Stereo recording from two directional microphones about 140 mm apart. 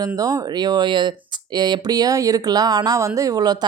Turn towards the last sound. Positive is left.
turn(degrees=-25)  # may be behind; listen again after turning